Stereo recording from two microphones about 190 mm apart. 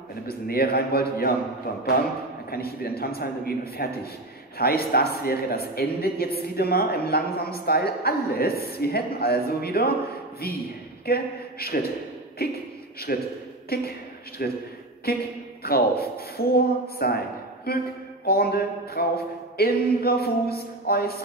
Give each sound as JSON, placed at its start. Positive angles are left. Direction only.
{"t": 0.3, "sound": "a man's voice", "side_deg": 55}
{"t": 2.5, "sound": "a man's voice", "side_deg": 55}
{"t": 11.1, "sound": "a man's voice", "side_deg": 55}